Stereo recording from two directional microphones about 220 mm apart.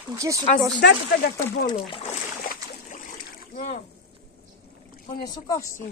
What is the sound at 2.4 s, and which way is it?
Boat, 35° left (ahead or behind).